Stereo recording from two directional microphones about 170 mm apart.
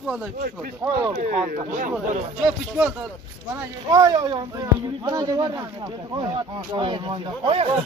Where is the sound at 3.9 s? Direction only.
20° right (ahead or behind).